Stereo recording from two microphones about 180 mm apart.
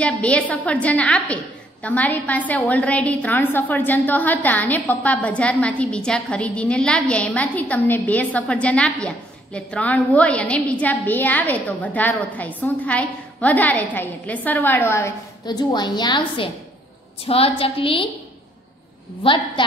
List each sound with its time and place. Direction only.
0.0 s a woman's voice: 5° left (ahead or behind); by 18.0 s 30° left (ahead or behind)
19.2 s a woman's voice: 30° left (ahead or behind)